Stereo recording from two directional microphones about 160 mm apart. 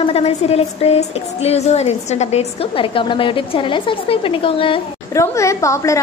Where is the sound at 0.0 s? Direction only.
40° left (ahead or behind).